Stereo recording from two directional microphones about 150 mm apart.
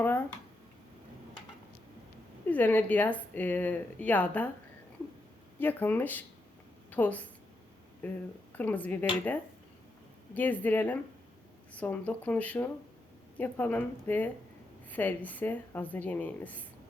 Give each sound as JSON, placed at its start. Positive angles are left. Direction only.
{"t": 0.0, "sound": "a sound", "side_deg": 10}
{"t": 2.5, "sound": "speech", "side_deg": 10}
{"t": 5.5, "sound": "speech", "side_deg": 15}
{"t": 10.3, "sound": "speech", "side_deg": 10}